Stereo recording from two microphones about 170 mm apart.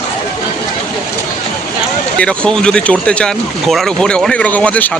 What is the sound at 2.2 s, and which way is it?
Speech, 5° left (ahead or behind).